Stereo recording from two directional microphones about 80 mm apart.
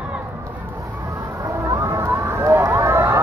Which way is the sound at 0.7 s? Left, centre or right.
Right.